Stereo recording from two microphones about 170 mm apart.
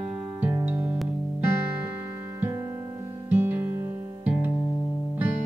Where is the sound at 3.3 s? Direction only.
10° right (ahead or behind).